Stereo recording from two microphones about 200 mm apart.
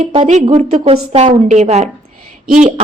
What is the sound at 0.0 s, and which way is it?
A woman's voice, 30° right (ahead or behind).